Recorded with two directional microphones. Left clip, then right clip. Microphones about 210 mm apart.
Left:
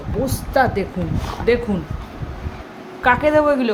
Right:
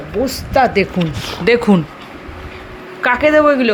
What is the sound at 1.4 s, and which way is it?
Speech, 45° right (ahead or behind).